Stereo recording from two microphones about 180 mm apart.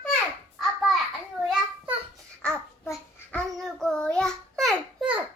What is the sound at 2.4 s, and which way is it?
Babbling, 5° left (ahead or behind).